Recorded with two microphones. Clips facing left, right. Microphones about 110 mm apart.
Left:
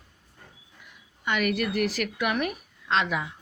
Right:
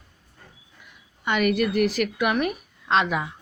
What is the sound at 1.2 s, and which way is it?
Speech, 20° right (ahead or behind).